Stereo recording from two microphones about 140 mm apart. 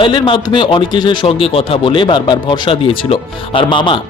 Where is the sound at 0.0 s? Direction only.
35° left (ahead or behind).